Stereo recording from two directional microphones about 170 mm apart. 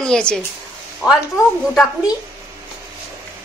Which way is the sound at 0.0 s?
5° left (ahead or behind).